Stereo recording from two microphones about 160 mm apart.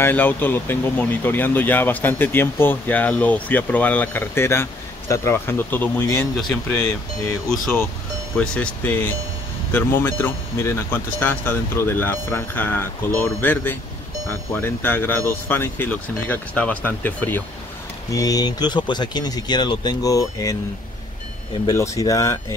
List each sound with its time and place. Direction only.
0.0 s speech: 10° left (ahead or behind)
6.3 s speech: centre (ahead or behind)
8.4 s speech: 5° left (ahead or behind)
18.1 s speech: 20° left (ahead or behind)
21.6 s speech: 20° left (ahead or behind)